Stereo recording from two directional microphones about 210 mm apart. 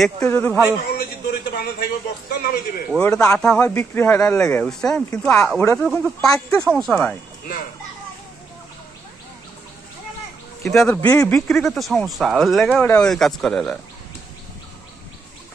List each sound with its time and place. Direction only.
0.2 s speech: 10° left (ahead or behind)
0.9 s a man's voice: 50° left (ahead or behind)
3.1 s speech: 15° left (ahead or behind)
10.6 s a man's voice: centre (ahead or behind)